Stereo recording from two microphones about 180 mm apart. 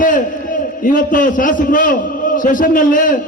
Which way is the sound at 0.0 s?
50° left (ahead or behind).